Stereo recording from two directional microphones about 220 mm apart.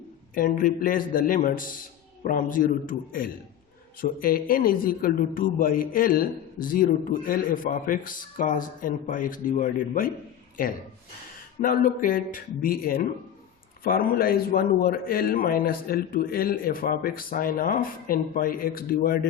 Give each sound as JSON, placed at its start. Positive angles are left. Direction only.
{"t": 0.3, "sound": "a man's voice", "side_deg": 40}
{"t": 11.6, "sound": "a man's voice", "side_deg": 40}